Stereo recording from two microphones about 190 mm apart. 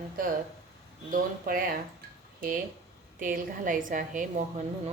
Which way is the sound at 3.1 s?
45° right (ahead or behind).